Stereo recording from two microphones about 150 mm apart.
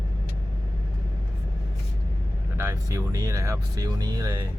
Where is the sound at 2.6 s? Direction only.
20° right (ahead or behind).